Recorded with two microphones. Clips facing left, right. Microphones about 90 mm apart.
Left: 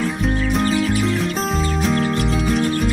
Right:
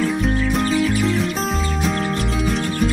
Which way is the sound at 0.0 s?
Centre (ahead or behind).